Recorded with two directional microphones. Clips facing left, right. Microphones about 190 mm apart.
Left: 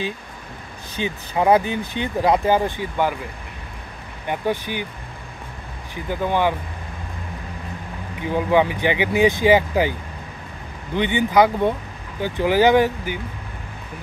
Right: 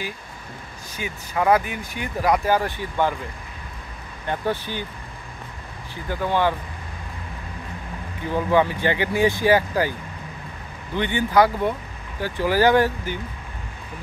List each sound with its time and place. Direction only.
0.9 s speech: 25° left (ahead or behind)
4.3 s speech: 15° left (ahead or behind)
6.0 s speech: 15° left (ahead or behind)
8.2 s speech: 15° left (ahead or behind)
11.0 s speech: 15° left (ahead or behind)